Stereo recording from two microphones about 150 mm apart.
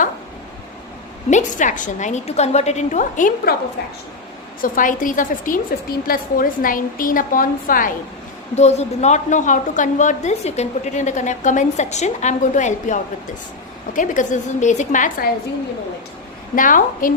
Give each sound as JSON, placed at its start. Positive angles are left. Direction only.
{"t": 1.3, "sound": "a woman's voice", "side_deg": 55}
{"t": 3.8, "sound": "a woman's voice", "side_deg": 90}
{"t": 4.6, "sound": "a woman's voice", "side_deg": 65}
{"t": 8.5, "sound": "a woman's voice", "side_deg": 45}
{"t": 16.6, "sound": "a woman's voice", "side_deg": 65}